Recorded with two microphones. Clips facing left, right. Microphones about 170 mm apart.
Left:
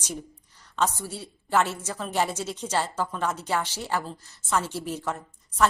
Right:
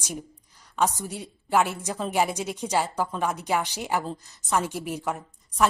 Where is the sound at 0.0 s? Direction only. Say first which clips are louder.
Even; 10° right (ahead or behind).